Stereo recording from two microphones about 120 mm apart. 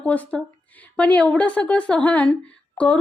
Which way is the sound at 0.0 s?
10° left (ahead or behind).